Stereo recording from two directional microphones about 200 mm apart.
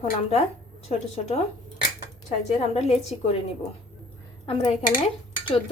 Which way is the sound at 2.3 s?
35° left (ahead or behind).